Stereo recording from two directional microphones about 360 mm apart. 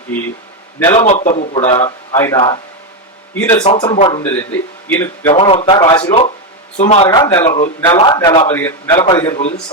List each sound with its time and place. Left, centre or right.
0.1 s speech: centre
0.9 s a man's voice: centre